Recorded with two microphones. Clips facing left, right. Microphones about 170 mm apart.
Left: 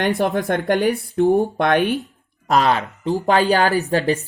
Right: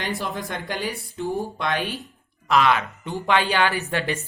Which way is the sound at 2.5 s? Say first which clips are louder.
Left 2 dB; 35° left (ahead or behind).